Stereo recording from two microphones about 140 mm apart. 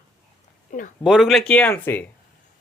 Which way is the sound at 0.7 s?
65° left (ahead or behind).